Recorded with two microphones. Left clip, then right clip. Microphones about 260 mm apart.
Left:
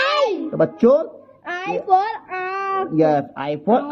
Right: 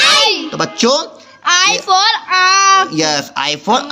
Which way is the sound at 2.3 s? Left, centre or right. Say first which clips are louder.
Right 14 dB; right.